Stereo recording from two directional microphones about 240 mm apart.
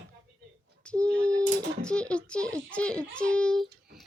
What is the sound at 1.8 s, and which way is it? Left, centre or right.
A child's voice, centre.